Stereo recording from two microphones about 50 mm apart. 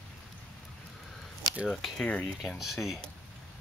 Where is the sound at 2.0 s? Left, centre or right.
Centre.